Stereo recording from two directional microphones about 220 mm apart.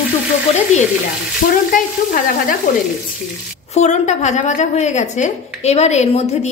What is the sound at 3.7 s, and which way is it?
A woman's voice, 30° left (ahead or behind).